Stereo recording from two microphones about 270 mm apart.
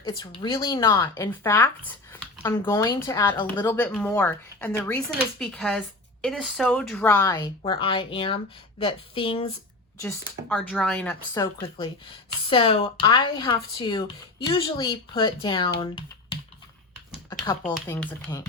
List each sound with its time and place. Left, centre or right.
0.0 s a woman's voice: centre
10.0 s speech: centre
11.4 s a woman's voice: centre
15.8 s typing: centre
17.7 s a woman's voice: centre